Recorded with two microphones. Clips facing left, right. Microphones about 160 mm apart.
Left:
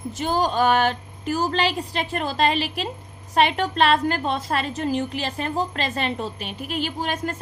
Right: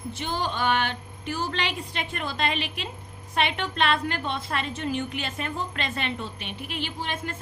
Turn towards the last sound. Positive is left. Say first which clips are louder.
# left 6 dB
turn(degrees=45)  # may be behind; listen again after turning